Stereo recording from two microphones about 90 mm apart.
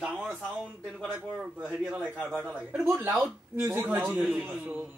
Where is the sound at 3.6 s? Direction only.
30° right (ahead or behind).